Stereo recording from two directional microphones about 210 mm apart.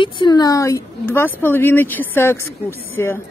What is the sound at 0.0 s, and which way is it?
A woman's voice, 20° left (ahead or behind).